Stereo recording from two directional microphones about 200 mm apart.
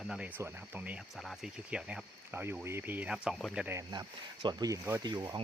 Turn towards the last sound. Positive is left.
turn(degrees=-20)  # may be behind; listen again after turning